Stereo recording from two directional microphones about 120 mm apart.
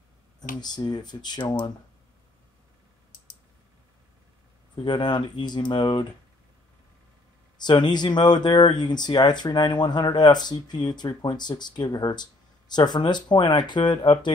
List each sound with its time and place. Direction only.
0.4 s speech: 35° left (ahead or behind)
4.8 s speech: 40° left (ahead or behind)
7.5 s speech: 35° left (ahead or behind)